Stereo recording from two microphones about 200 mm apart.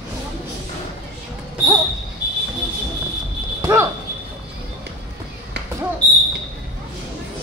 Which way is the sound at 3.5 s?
15° right (ahead or behind).